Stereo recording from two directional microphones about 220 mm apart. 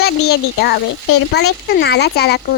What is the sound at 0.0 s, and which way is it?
Speech, 45° left (ahead or behind).